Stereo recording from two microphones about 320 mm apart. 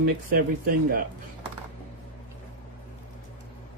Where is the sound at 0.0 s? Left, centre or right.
Right.